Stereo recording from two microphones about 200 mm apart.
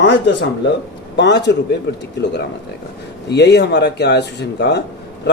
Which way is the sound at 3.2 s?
60° left (ahead or behind).